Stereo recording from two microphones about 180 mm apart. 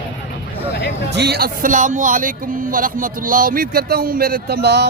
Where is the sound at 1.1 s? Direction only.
65° right (ahead or behind).